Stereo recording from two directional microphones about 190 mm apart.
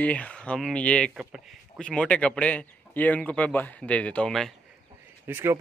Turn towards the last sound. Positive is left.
turn(degrees=-10)  # may be behind; listen again after turning